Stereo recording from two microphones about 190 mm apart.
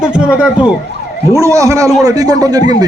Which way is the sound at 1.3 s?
15° right (ahead or behind).